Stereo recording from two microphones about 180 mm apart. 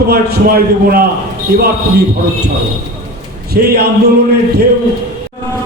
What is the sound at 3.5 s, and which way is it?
Speech, 60° right (ahead or behind).